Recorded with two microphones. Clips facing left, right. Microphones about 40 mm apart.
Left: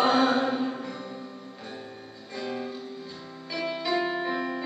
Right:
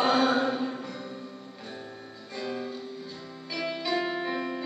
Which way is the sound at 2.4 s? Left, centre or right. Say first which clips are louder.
Left 1 dB; centre.